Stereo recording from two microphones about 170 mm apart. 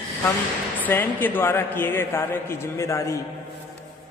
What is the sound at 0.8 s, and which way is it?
A man's voice, 10° left (ahead or behind).